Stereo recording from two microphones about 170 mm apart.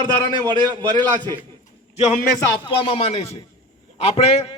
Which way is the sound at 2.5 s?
30° left (ahead or behind).